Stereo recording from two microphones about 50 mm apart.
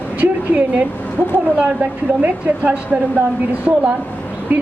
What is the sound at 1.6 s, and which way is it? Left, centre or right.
A woman's voice, right.